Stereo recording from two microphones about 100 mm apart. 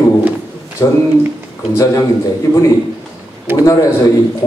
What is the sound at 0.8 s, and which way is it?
Speech, 30° left (ahead or behind).